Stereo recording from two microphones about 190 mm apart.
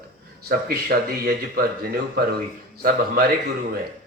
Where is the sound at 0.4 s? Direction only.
55° right (ahead or behind).